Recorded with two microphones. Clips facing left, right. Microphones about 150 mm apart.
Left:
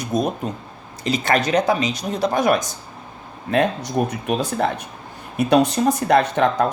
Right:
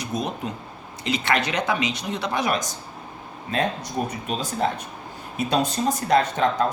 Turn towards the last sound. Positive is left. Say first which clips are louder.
# left 3 dB
turn(degrees=65)  # may be behind; listen again after turning